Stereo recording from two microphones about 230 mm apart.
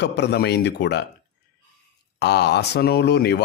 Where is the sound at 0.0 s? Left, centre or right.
Left.